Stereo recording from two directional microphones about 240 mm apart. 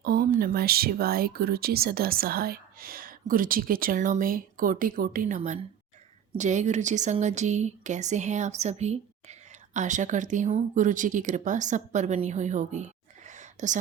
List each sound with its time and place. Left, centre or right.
0.0 s a woman's voice: right